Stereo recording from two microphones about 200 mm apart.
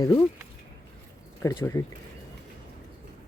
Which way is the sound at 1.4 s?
15° left (ahead or behind).